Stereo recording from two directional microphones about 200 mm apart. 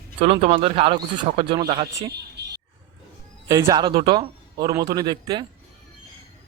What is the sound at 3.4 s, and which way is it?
Speech, 15° right (ahead or behind).